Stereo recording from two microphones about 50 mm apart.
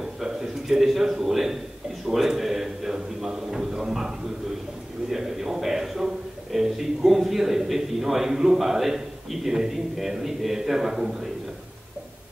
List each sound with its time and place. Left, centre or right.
0.0 s a man's voice: centre
5.1 s a man's voice: centre